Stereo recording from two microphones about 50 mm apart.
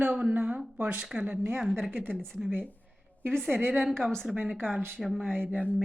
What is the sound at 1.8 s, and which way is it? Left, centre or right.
Speech, right.